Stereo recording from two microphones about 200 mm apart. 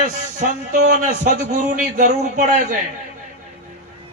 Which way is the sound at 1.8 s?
40° right (ahead or behind).